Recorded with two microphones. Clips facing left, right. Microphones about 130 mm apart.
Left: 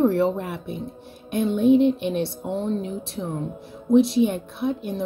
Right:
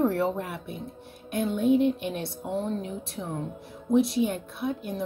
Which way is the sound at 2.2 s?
75° left (ahead or behind).